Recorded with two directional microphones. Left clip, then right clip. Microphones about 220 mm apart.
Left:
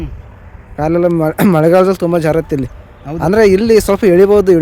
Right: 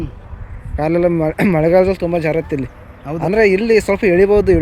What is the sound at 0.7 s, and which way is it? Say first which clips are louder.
Speech: left 2 dB; 15° left (ahead or behind).